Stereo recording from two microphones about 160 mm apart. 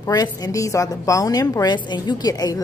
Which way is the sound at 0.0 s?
25° left (ahead or behind).